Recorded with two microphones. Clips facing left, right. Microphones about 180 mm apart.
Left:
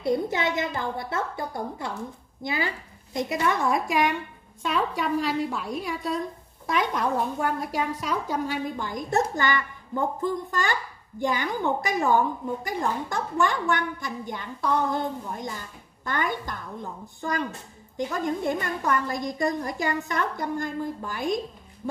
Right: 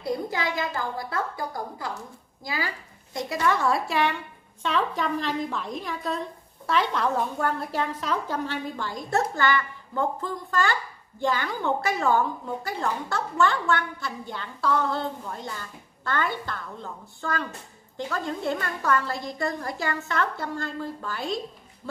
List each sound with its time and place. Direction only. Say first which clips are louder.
0.0 s a woman's voice: left 3 dB; 25° left (ahead or behind)